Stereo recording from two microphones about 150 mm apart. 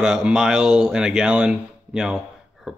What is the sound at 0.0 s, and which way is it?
Speech, 5° right (ahead or behind).